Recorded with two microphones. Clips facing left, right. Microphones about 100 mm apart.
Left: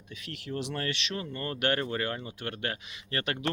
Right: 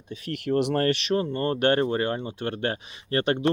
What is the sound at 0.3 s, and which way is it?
Speech, 55° right (ahead or behind).